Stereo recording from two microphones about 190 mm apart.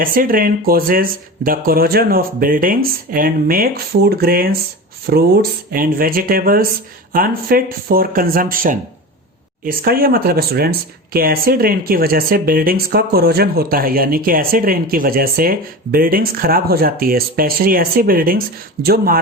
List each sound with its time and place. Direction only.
0.0 s speech: 50° right (ahead or behind)